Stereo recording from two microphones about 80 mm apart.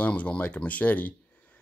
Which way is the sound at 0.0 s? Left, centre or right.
Centre.